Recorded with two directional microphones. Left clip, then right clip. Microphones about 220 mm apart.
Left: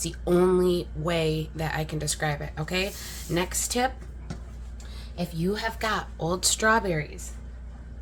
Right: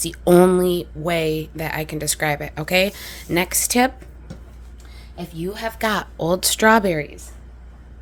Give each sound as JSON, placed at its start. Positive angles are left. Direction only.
{"t": 0.0, "sound": "speech", "side_deg": -35}
{"t": 5.5, "sound": "speech", "side_deg": -45}